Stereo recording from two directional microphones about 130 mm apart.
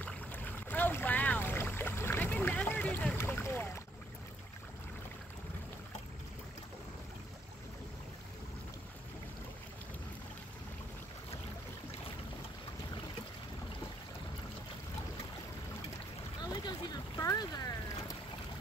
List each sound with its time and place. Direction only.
0.0 s boat: 15° left (ahead or behind)
16.6 s boat: 30° left (ahead or behind)